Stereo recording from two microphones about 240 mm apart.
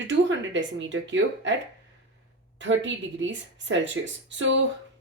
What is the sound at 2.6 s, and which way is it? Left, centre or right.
Speech, right.